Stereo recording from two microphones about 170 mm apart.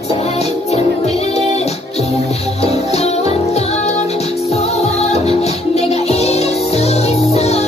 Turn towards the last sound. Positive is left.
turn(degrees=40)  # may be behind; listen again after turning